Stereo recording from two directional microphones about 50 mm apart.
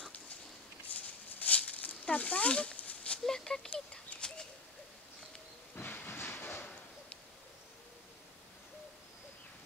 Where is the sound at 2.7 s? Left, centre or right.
Left.